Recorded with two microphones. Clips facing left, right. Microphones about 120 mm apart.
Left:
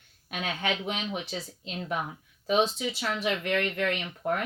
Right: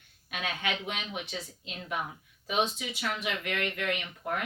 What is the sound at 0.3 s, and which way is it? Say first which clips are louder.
Speech: left 3 dB; 35° left (ahead or behind).